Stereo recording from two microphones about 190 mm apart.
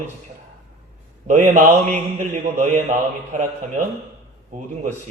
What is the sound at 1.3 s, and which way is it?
A man's voice, 40° right (ahead or behind).